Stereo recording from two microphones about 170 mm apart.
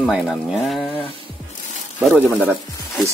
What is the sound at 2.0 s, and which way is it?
Speech, 10° right (ahead or behind).